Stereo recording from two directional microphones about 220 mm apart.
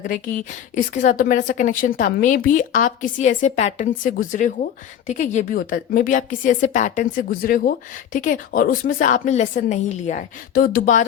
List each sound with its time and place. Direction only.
0.9 s a woman's voice: 35° left (ahead or behind)